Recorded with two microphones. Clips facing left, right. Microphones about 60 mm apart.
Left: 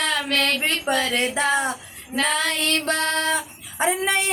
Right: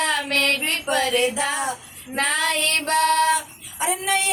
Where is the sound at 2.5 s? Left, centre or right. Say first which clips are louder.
Right 1 dB; right.